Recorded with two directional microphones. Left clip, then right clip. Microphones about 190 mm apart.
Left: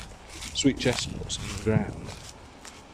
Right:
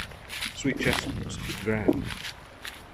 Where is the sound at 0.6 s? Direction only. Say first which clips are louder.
Left 3 dB; 10° left (ahead or behind).